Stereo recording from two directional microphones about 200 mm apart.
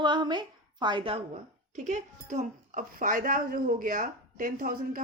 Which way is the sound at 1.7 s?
40° right (ahead or behind).